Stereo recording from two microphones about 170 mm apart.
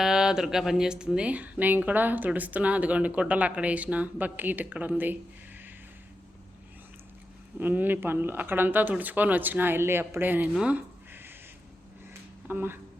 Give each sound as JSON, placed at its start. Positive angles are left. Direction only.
{"t": 0.0, "sound": "speech", "side_deg": -5}
{"t": 7.6, "sound": "speech", "side_deg": -10}
{"t": 10.5, "sound": "a sound", "side_deg": -5}
{"t": 12.5, "sound": "speech", "side_deg": -10}